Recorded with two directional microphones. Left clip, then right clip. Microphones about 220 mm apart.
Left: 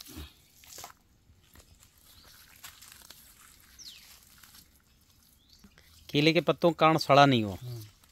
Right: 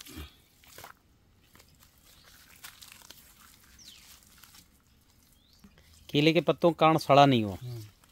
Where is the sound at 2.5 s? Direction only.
5° right (ahead or behind).